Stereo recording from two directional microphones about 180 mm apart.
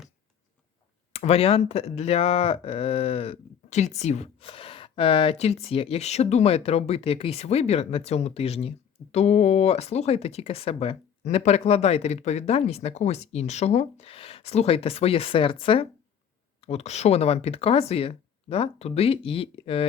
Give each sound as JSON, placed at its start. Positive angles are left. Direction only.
{"t": 1.1, "sound": "speech", "side_deg": 35}